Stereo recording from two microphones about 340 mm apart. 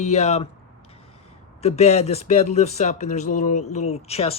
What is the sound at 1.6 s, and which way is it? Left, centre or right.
Speech, centre.